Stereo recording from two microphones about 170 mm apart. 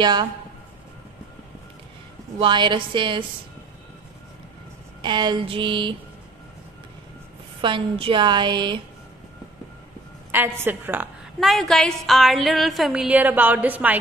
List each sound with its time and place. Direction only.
0.0 s a woman's voice: 25° right (ahead or behind)
2.3 s a woman's voice: 30° right (ahead or behind)
5.0 s a woman's voice: 25° right (ahead or behind)
7.6 s a woman's voice: 30° right (ahead or behind)
10.3 s a woman's voice: 10° right (ahead or behind)
11.3 s a woman's voice: centre (ahead or behind)